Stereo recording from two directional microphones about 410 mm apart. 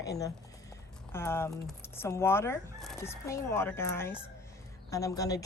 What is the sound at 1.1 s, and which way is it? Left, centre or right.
A woman's voice, centre.